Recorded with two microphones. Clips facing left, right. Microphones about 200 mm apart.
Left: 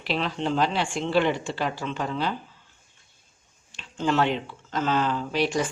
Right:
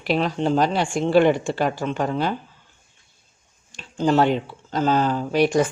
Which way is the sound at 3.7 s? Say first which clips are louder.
Right 5 dB; 40° right (ahead or behind).